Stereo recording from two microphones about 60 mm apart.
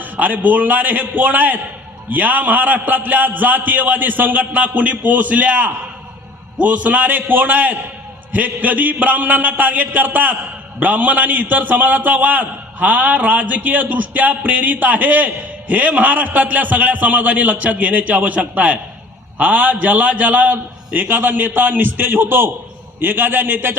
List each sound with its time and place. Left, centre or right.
0.0 s a man's voice: right